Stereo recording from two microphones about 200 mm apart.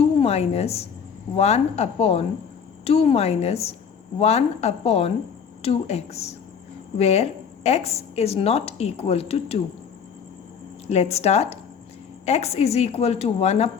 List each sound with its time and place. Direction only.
0.2 s a woman's voice: 30° left (ahead or behind)
10.8 s a woman's voice: 30° left (ahead or behind)